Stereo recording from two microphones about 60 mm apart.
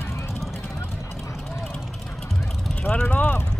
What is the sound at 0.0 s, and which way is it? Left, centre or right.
Vehicle, left.